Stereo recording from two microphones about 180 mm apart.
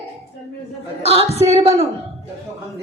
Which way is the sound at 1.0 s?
35° right (ahead or behind).